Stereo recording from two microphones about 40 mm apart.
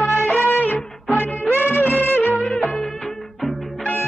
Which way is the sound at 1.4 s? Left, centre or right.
Left.